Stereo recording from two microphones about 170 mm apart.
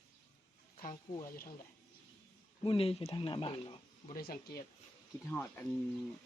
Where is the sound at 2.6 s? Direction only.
35° left (ahead or behind).